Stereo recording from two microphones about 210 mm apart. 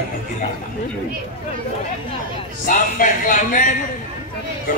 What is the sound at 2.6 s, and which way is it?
Speech, 40° left (ahead or behind).